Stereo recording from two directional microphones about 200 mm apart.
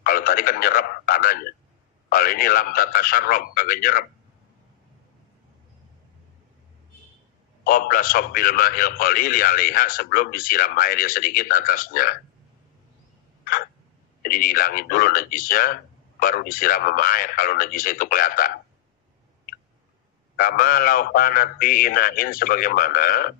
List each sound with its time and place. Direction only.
0.0 s a man's voice: 45° left (ahead or behind)
7.6 s a man's voice: 45° left (ahead or behind)
14.2 s a man's voice: 45° left (ahead or behind)
20.3 s a man's voice: 45° left (ahead or behind)